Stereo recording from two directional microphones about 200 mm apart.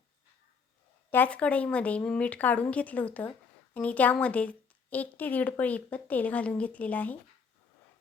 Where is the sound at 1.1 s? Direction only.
10° left (ahead or behind).